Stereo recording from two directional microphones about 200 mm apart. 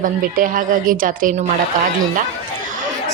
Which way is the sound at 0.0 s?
45° right (ahead or behind).